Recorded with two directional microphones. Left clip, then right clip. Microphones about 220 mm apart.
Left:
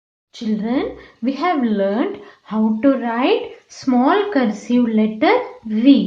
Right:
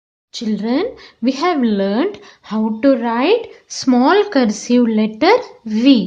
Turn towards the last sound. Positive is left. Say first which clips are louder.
# right 1 dB
turn(degrees=-45)  # may be behind; listen again after turning